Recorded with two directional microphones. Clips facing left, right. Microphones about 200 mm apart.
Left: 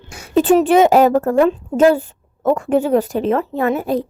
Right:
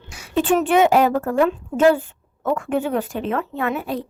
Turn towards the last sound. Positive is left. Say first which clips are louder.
# left 6 dB
turn(degrees=40)  # may be behind; listen again after turning